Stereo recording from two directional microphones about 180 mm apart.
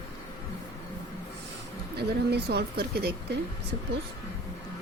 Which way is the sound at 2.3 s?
65° right (ahead or behind).